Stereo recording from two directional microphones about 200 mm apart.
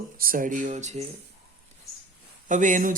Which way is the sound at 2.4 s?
40° right (ahead or behind).